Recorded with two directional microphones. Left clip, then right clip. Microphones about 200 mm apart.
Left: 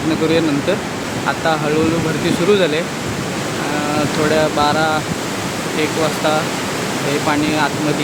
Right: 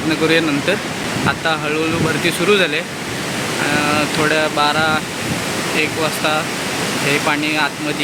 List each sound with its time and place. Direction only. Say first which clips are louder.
2.2 s speech: left 1 dB; 5° left (ahead or behind)
4.4 s speech: left 2 dB; 5° left (ahead or behind)
7.3 s speech: even; 5° left (ahead or behind)